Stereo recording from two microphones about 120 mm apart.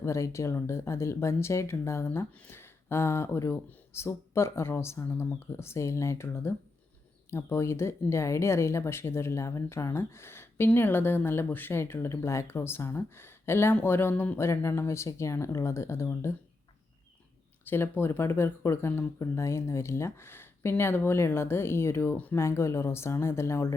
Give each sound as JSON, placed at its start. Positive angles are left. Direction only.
{"t": 0.0, "sound": "speech", "side_deg": 25}
{"t": 17.7, "sound": "speech", "side_deg": 20}